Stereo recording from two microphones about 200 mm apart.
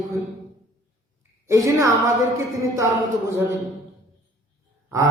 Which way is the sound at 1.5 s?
15° right (ahead or behind).